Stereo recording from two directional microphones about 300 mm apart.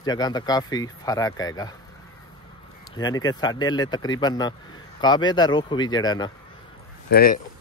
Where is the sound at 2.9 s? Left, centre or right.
Centre.